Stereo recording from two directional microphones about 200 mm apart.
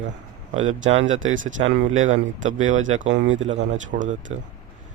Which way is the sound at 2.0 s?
40° right (ahead or behind).